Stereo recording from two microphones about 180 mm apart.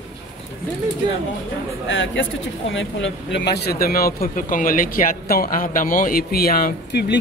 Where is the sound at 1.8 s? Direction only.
90° left.